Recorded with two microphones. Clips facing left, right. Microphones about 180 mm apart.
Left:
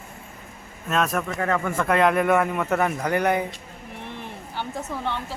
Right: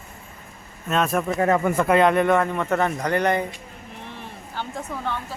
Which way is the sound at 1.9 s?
Centre (ahead or behind).